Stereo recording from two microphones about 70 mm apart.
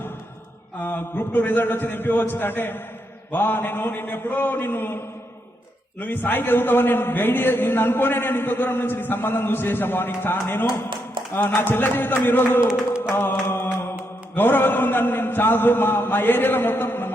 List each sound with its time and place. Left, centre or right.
0.8 s a man's voice: left
6.0 s a man's voice: left
13.1 s mantra: left
14.3 s a man's voice: left